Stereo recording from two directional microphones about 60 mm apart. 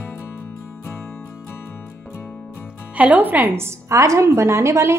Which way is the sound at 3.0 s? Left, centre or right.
Right.